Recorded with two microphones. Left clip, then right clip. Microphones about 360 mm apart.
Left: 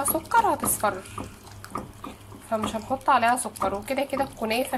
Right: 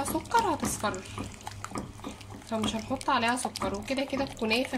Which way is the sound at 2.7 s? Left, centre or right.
Centre.